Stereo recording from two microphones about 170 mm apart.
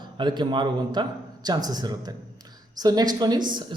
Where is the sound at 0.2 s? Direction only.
25° right (ahead or behind).